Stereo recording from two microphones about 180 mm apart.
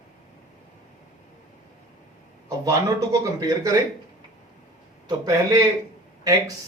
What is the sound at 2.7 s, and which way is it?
Speech, 20° right (ahead or behind).